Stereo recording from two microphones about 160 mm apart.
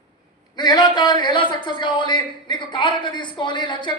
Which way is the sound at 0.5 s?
25° left (ahead or behind).